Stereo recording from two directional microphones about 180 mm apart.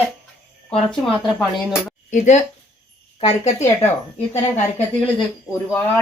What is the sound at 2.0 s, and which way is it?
Speech, 40° left (ahead or behind).